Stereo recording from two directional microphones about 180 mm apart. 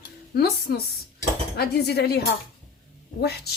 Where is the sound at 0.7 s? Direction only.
55° left (ahead or behind).